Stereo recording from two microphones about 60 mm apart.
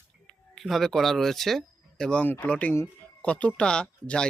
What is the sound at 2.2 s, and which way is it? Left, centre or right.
Speech, left.